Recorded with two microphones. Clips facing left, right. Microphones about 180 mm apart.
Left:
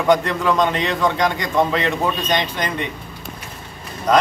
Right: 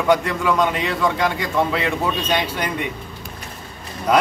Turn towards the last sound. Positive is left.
turn(degrees=-10)  # may be behind; listen again after turning